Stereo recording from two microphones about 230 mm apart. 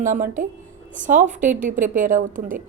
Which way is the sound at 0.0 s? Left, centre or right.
Right.